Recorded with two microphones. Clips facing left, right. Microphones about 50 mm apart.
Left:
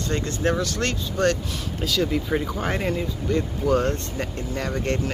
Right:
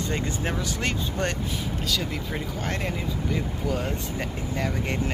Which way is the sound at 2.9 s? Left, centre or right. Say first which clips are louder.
Left 4 dB; centre.